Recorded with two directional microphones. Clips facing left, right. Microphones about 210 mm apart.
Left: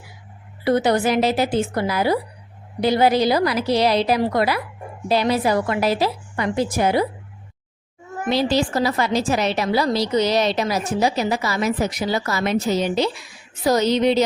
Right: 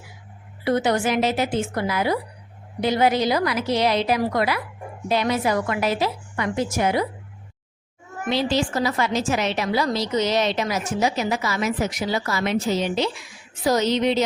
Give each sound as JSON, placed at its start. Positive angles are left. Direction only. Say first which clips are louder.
{"t": 0.6, "sound": "a woman's voice", "louder": "left 3 dB", "side_deg": 35}
{"t": 8.2, "sound": "a woman's voice", "louder": "left 3 dB", "side_deg": 40}